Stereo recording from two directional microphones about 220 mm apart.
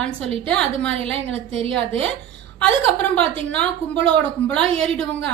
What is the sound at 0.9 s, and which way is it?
Speech, 25° right (ahead or behind).